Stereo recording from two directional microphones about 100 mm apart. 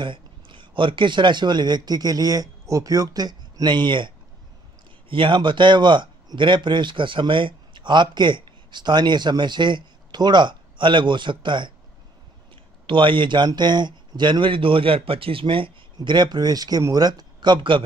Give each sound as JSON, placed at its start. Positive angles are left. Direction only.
{"t": 0.0, "sound": "speech", "side_deg": -55}
{"t": 5.1, "sound": "speech", "side_deg": -55}
{"t": 12.8, "sound": "speech", "side_deg": -55}